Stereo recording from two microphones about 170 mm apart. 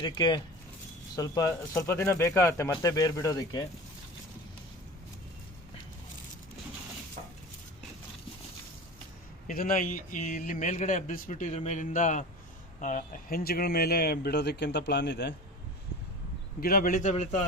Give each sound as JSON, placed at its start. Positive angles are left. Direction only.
{"t": 0.0, "sound": "speech", "side_deg": 25}
{"t": 9.5, "sound": "a man's voice", "side_deg": 55}
{"t": 16.6, "sound": "a man's voice", "side_deg": 60}